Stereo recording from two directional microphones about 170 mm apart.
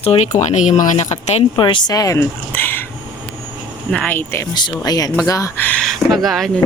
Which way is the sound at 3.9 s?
5° left (ahead or behind).